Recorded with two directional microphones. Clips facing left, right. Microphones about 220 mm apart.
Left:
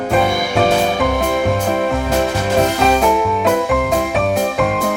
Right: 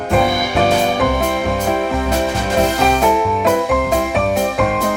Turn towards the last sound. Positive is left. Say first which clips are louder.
# even
turn(degrees=0)  # may be behind; listen again after turning